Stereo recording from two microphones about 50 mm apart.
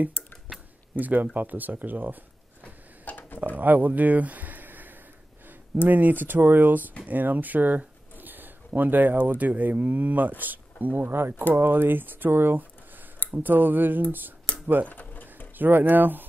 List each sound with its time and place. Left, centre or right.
0.9 s speech: right
2.6 s tick-tock: left
3.5 s a sound: right
5.9 s speech: right
14.9 s a sound: left
15.5 s speech: right